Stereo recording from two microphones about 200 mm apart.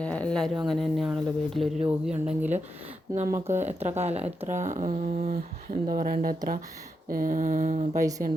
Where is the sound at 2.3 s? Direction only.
10° right (ahead or behind).